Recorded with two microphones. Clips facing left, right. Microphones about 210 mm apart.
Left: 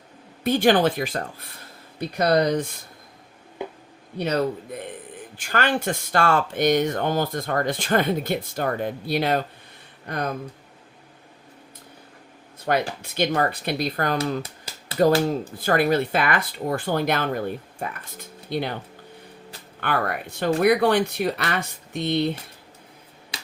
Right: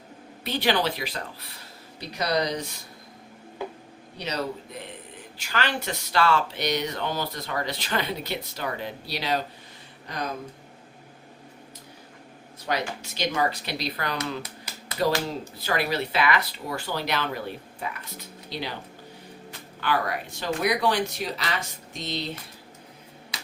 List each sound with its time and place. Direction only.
0.4 s speech: 50° left (ahead or behind)
4.2 s speech: 55° left (ahead or behind)
13.0 s speech: 55° left (ahead or behind)
19.8 s speech: 55° left (ahead or behind)